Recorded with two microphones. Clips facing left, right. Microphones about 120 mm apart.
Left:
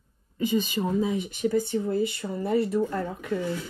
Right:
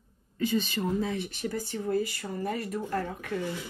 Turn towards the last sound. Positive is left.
turn(degrees=20)  # may be behind; listen again after turning